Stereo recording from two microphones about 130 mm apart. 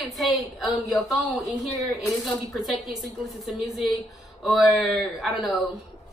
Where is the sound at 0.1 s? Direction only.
Centre (ahead or behind).